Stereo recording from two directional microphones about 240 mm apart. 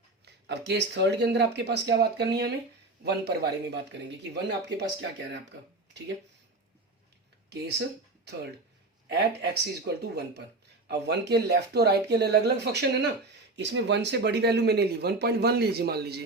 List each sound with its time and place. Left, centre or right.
0.3 s speech: right
9.1 s speech: right